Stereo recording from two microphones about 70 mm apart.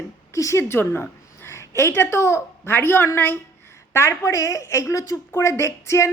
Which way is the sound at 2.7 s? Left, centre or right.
Left.